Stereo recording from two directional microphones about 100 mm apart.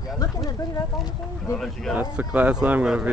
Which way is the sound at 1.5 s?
5° left (ahead or behind).